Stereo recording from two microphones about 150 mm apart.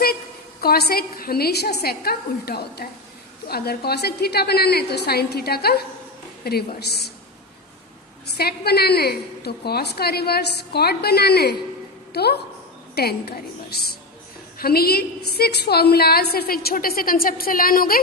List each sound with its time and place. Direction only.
0.6 s a woman's voice: 90° left
8.4 s a woman's voice: 90° left